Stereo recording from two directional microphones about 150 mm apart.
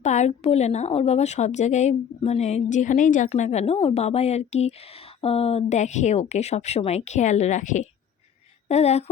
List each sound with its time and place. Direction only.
0.0 s speech: 50° left (ahead or behind)